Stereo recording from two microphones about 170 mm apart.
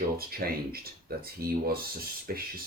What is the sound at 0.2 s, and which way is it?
Speech, 60° right (ahead or behind).